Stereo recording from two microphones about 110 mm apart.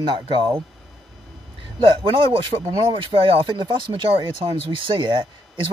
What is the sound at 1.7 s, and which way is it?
Speech, 55° right (ahead or behind).